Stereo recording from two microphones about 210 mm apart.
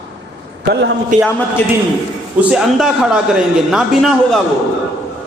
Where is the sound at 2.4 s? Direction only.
5° right (ahead or behind).